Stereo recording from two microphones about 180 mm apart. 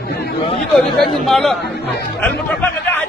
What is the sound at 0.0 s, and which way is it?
Speech, 60° left (ahead or behind).